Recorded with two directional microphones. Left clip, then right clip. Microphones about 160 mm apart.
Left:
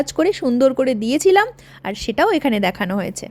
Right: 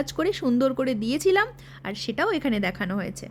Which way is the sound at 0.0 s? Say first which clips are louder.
Left 7 dB; 25° left (ahead or behind).